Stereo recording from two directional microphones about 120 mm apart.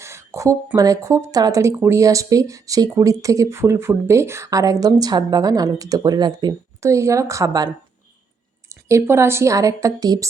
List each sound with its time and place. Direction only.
0.0 s a sound: 25° right (ahead or behind)
0.8 s speech: 25° right (ahead or behind)
6.8 s speech: 25° right (ahead or behind)
8.7 s speech: 25° right (ahead or behind)